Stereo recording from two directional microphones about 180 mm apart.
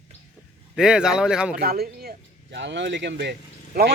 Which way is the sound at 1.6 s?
60° right (ahead or behind).